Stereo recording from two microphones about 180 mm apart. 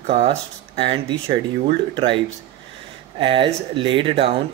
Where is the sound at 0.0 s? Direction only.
35° right (ahead or behind).